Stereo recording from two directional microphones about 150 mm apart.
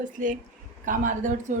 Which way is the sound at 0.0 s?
60° right (ahead or behind).